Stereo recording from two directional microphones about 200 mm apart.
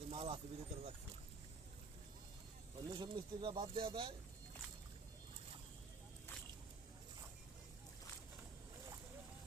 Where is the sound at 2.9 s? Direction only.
25° right (ahead or behind).